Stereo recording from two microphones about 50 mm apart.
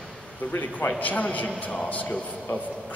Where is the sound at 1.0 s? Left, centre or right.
Left.